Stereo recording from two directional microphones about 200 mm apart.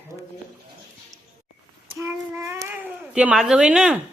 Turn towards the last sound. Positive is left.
turn(degrees=-5)  # may be behind; listen again after turning